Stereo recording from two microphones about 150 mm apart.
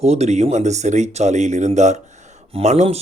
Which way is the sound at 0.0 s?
45° right (ahead or behind).